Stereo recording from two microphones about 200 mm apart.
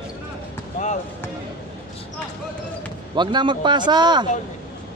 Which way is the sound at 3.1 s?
20° right (ahead or behind).